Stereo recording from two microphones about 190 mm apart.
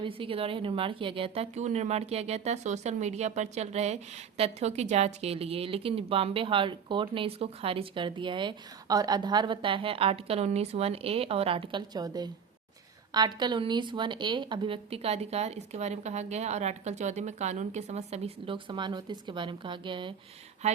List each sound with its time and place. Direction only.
0.0 s a woman's voice: 30° right (ahead or behind)
20.6 s a woman's voice: 35° right (ahead or behind)